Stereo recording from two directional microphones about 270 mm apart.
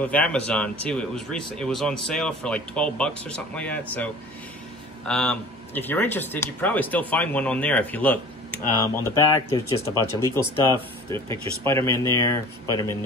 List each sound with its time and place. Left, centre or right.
0.0 s speech: centre
5.0 s speech: centre
9.9 s speech: centre
11.1 s speech: centre